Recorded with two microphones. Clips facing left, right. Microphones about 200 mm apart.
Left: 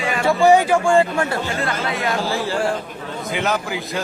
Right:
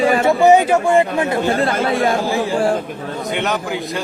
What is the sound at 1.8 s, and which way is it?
Speech, 30° right (ahead or behind).